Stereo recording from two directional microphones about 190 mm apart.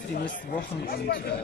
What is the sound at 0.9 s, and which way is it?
Speech, 60° left (ahead or behind).